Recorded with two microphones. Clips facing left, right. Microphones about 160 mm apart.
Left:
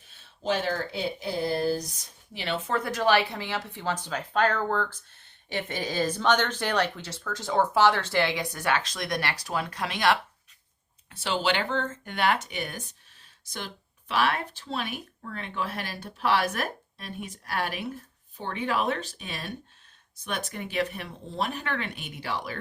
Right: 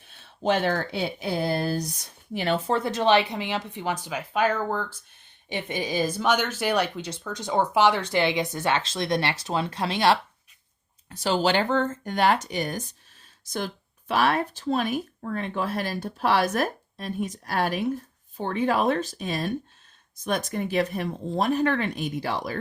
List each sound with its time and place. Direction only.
0.4 s speech: 60° right (ahead or behind)
2.3 s speech: 50° right (ahead or behind)
2.6 s speech: 25° right (ahead or behind)
11.1 s speech: 40° right (ahead or behind)